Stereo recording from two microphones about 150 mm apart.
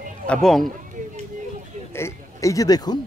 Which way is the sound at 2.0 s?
20° left (ahead or behind).